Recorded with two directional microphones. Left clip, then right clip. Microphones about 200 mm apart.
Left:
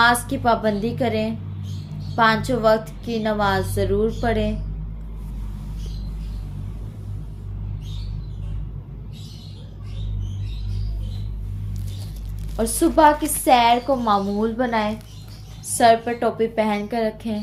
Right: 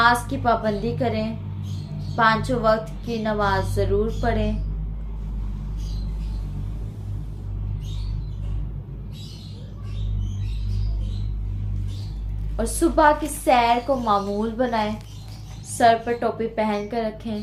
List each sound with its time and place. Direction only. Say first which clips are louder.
0.0 s a woman's voice: left 1 dB; 35° left (ahead or behind)
12.5 s a woman's voice: left 2 dB; 35° left (ahead or behind)